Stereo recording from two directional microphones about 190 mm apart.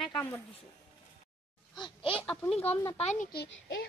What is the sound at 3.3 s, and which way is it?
Speech, 55° left (ahead or behind).